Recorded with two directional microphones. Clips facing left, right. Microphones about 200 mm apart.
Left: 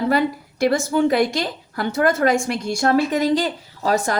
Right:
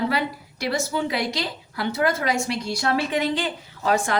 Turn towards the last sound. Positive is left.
turn(degrees=40)  # may be behind; listen again after turning